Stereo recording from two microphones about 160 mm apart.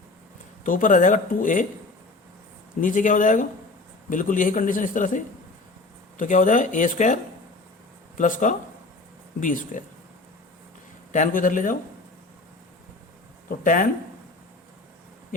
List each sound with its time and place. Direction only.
0.6 s a man's voice: 55° left (ahead or behind)
2.8 s a man's voice: 55° left (ahead or behind)
11.1 s a man's voice: 55° left (ahead or behind)
13.5 s a man's voice: 55° left (ahead or behind)